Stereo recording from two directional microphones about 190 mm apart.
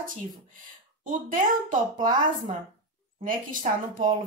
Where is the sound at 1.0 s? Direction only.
40° right (ahead or behind).